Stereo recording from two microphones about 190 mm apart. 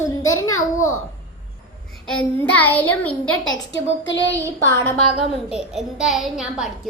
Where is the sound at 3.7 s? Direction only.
75° left (ahead or behind).